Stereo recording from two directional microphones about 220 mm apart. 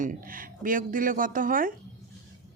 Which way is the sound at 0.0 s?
40° right (ahead or behind).